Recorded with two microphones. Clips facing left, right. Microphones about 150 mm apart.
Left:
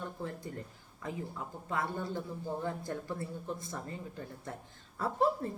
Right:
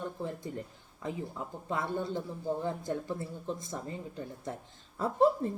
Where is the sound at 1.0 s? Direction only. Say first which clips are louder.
Right 3 dB; 20° right (ahead or behind).